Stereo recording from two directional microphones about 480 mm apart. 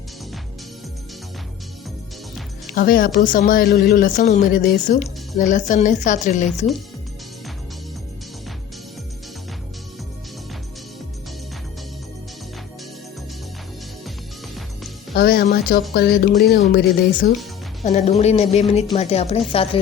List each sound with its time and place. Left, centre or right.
2.7 s speech: centre
15.1 s speech: centre